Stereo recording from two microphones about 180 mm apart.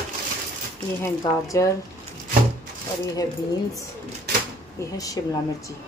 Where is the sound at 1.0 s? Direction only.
20° left (ahead or behind).